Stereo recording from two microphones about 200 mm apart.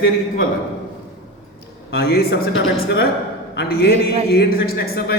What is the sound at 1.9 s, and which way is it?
A man's voice, 50° left (ahead or behind).